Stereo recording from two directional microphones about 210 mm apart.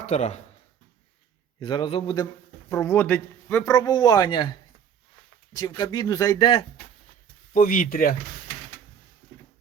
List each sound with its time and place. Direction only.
0.0 s speech: 35° left (ahead or behind)
1.5 s a man's voice: 20° left (ahead or behind)
2.6 s a man's voice: 15° left (ahead or behind)
5.5 s a man's voice: 20° left (ahead or behind)
7.5 s speech: 40° left (ahead or behind)